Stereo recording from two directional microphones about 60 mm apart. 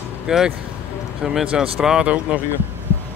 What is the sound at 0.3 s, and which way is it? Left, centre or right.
Speech, centre.